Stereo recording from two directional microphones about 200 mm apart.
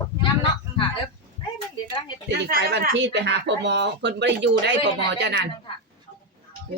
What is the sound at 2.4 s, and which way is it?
Speech, 50° right (ahead or behind).